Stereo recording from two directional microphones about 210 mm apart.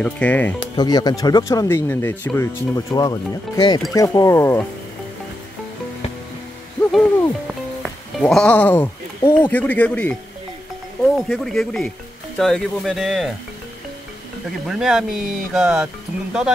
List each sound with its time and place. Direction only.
0.0 s speech: 5° left (ahead or behind)
0.7 s speech: 20° left (ahead or behind)
6.9 s hoot: 5° left (ahead or behind)
7.4 s speech: centre (ahead or behind)
11.1 s speech: centre (ahead or behind)
14.7 s speech: centre (ahead or behind)